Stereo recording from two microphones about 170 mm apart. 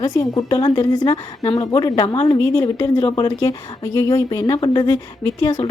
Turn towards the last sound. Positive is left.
turn(degrees=25)  # may be behind; listen again after turning